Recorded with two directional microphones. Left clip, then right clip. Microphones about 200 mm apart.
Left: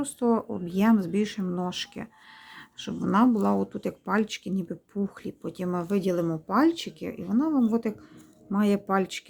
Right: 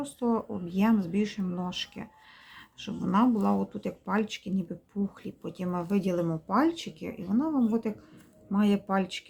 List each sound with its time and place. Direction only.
0.0 s speech: 20° left (ahead or behind)